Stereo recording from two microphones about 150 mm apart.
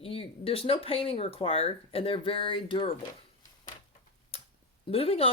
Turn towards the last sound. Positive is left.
turn(degrees=40)  # may be behind; listen again after turning